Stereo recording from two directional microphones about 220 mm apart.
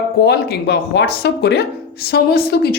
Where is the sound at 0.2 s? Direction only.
45° left (ahead or behind).